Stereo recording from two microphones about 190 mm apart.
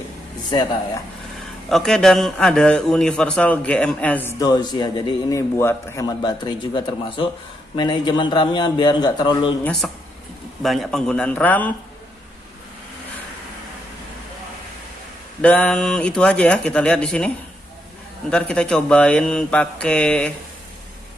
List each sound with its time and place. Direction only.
1.7 s a man's voice: centre (ahead or behind); by 9.6 s 25° left (ahead or behind)
9.6 s a man's voice: 5° left (ahead or behind)
15.4 s speech: 5° left (ahead or behind)
18.3 s speech: 5° left (ahead or behind)